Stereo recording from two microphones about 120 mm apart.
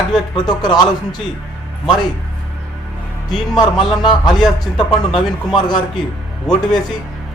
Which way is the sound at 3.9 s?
35° left (ahead or behind).